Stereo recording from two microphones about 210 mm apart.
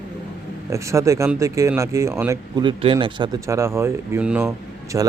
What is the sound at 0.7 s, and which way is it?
Speech, 15° right (ahead or behind).